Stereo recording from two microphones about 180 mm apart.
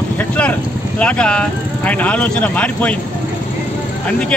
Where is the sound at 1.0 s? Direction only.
5° left (ahead or behind).